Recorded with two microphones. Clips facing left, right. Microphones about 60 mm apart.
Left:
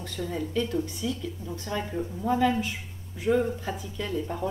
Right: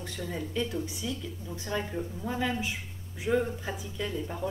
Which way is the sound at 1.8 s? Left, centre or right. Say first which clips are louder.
Left 3 dB; centre.